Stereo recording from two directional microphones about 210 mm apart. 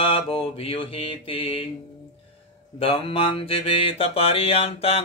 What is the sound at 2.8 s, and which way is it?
Mantra, 25° left (ahead or behind).